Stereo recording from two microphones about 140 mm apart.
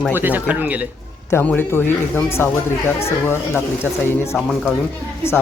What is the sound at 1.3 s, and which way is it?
A woman's voice, 10° left (ahead or behind).